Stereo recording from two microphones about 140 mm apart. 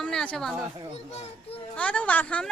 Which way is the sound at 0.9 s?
45° left (ahead or behind).